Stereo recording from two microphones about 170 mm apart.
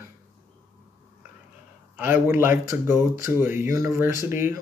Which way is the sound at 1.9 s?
10° right (ahead or behind).